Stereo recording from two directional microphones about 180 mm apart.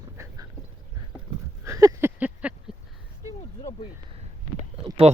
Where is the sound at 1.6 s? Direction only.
20° right (ahead or behind).